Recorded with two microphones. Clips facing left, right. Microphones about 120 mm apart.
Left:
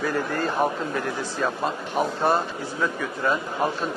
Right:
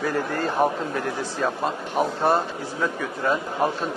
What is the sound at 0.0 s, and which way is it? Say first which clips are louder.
Speech: even; 40° right (ahead or behind).